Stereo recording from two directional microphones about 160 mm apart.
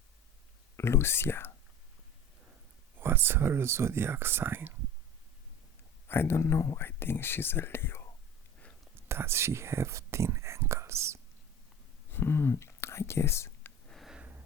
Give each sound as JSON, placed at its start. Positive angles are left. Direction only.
{"t": 0.8, "sound": "speech", "side_deg": 15}
{"t": 3.0, "sound": "speech", "side_deg": -15}
{"t": 6.1, "sound": "speech", "side_deg": 15}
{"t": 9.0, "sound": "speech", "side_deg": -15}
{"t": 12.1, "sound": "whispering", "side_deg": 15}
{"t": 13.9, "sound": "a sound", "side_deg": 0}